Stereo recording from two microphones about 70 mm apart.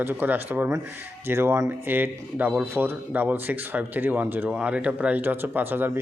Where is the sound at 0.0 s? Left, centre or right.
Right.